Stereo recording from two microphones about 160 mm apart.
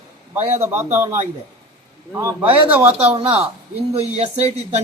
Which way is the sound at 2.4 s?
35° right (ahead or behind).